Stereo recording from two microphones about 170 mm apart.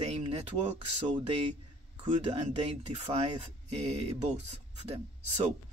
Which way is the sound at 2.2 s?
40° right (ahead or behind).